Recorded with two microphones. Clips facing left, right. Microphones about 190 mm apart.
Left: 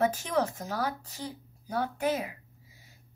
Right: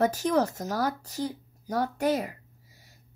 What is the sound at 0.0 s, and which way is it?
Speech, 40° right (ahead or behind).